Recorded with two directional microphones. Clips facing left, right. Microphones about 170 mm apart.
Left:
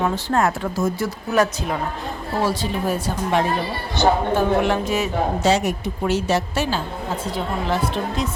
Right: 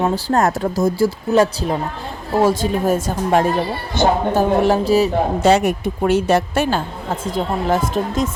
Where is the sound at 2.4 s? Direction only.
45° right (ahead or behind).